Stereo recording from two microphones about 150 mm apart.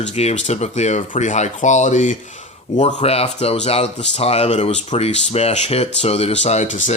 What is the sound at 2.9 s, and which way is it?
Speech, 45° left (ahead or behind).